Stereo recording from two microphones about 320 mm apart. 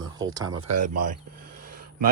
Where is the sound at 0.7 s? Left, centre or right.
Right.